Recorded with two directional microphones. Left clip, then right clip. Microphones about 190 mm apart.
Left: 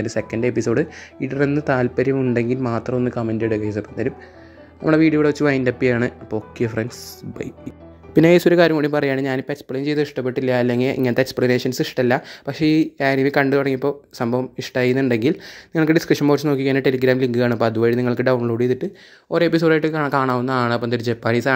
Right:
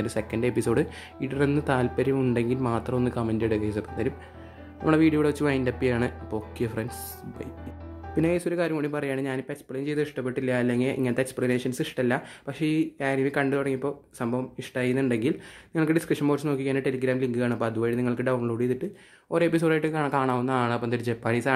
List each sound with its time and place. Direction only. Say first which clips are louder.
0.0 s speech: left 6 dB; 15° left (ahead or behind)
8.1 s speech: left 12 dB; 35° left (ahead or behind); by 21.5 s 20° left (ahead or behind)